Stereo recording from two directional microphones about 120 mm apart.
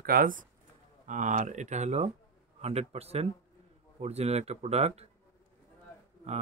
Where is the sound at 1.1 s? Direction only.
90° right; by 5.1 s 60° right (ahead or behind).